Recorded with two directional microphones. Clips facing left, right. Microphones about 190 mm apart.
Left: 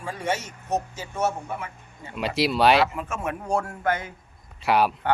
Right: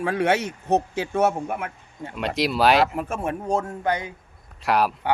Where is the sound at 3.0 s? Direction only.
35° right (ahead or behind).